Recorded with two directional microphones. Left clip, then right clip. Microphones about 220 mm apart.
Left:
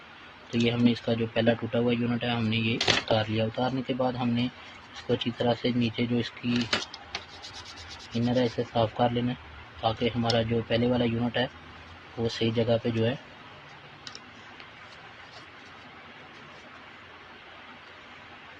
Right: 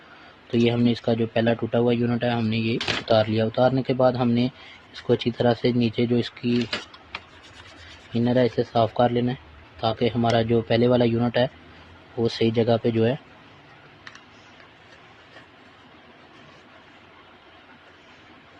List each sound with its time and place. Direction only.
0.5 s speech: 45° right (ahead or behind)
8.3 s speech: 50° right (ahead or behind)